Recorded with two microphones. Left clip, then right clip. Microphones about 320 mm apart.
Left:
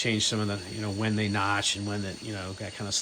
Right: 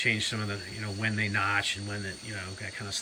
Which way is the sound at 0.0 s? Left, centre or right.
Centre.